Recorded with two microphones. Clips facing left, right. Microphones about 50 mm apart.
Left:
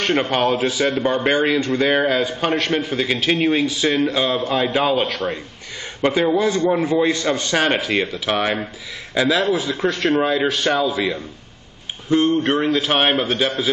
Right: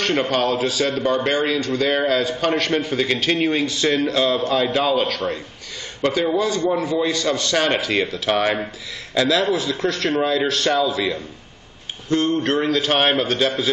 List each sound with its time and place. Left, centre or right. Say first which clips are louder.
0.1 s a man's voice: left 3 dB; centre
0.6 s a man's voice: left 2 dB; left
2.0 s a man's voice: left 1 dB; centre
2.5 s a man's voice: even; centre
9.1 s a man's voice: left 1 dB; centre